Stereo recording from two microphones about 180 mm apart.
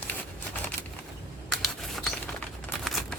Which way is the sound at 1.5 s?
5° left (ahead or behind).